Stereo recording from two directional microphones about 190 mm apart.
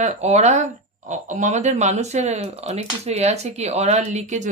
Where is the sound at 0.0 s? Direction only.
35° right (ahead or behind).